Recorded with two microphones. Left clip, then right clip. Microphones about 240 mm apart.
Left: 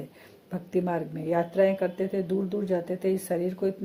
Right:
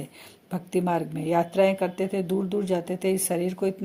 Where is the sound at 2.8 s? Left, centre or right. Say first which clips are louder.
Right 2 dB; right.